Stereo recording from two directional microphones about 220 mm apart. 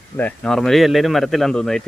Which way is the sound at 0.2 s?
5° left (ahead or behind).